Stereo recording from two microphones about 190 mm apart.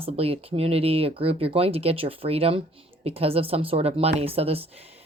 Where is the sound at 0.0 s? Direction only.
30° right (ahead or behind).